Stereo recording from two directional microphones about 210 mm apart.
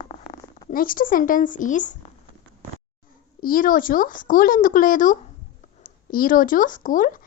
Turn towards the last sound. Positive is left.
turn(degrees=40)  # may be behind; listen again after turning